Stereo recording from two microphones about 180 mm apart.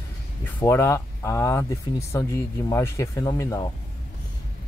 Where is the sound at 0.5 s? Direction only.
15° left (ahead or behind).